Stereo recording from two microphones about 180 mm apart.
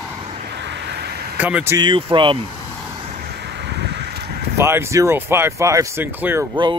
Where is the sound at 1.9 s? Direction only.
30° right (ahead or behind).